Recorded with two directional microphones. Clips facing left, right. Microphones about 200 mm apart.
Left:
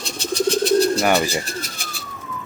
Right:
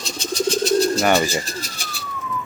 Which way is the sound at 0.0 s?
60° left (ahead or behind).